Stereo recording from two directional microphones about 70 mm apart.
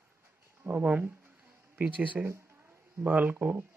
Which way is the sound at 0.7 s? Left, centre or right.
Right.